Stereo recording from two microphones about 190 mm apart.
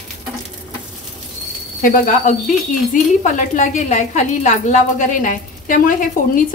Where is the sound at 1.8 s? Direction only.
45° left (ahead or behind).